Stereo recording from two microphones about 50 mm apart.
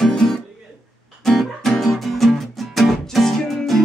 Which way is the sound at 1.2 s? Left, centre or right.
Centre.